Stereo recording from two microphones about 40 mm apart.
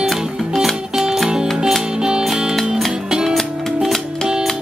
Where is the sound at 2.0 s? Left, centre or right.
Right.